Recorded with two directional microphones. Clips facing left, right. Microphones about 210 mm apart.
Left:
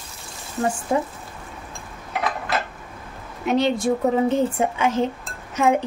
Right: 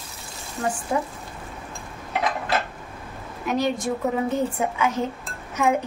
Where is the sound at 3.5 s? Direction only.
25° left (ahead or behind).